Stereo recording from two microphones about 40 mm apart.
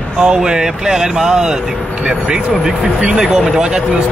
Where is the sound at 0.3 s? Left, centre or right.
Centre.